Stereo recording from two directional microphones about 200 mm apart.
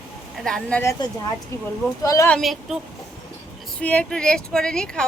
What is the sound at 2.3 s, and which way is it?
Speech, centre (ahead or behind).